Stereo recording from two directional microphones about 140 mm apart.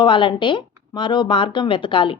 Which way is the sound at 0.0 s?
35° left (ahead or behind).